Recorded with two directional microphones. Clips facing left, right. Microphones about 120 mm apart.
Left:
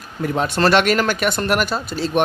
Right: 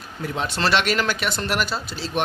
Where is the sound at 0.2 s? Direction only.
50° left (ahead or behind).